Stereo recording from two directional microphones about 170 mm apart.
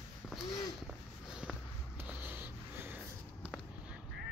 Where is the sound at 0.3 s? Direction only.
Centre (ahead or behind).